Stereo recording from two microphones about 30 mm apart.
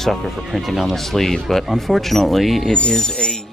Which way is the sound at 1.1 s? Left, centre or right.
Centre.